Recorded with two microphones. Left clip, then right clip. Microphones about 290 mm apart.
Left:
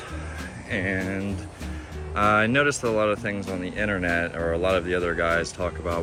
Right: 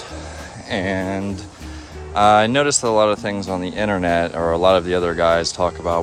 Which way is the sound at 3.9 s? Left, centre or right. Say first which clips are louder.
Right 7 dB; right.